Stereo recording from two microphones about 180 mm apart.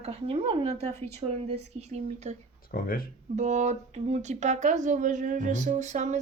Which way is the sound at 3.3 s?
40° right (ahead or behind).